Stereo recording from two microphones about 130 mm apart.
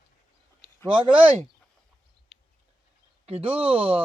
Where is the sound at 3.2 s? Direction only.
50° right (ahead or behind).